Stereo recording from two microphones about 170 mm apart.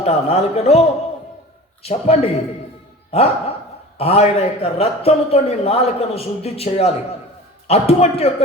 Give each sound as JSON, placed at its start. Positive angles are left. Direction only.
{"t": 0.0, "sound": "speech", "side_deg": 35}